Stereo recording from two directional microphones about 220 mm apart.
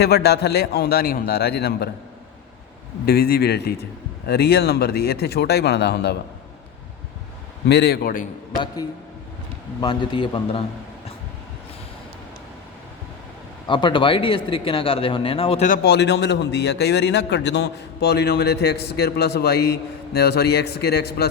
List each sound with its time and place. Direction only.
0.0 s speech: 45° left (ahead or behind)
3.1 s speech: 45° left (ahead or behind)
7.7 s speech: 50° left (ahead or behind)
8.6 s a man's voice: 15° left (ahead or behind)
13.7 s speech: 20° left (ahead or behind); by 21.2 s 45° left (ahead or behind)